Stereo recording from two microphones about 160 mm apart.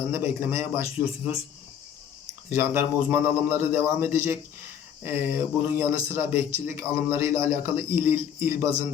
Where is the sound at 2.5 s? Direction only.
15° right (ahead or behind).